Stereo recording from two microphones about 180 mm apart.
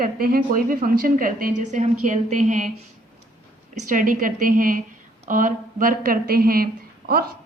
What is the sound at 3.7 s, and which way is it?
A woman's voice, 45° right (ahead or behind).